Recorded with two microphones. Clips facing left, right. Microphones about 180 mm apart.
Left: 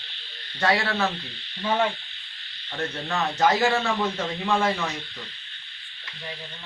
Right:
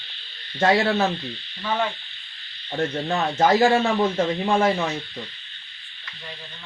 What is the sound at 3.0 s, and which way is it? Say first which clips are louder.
Speech: right 2 dB; 30° right (ahead or behind).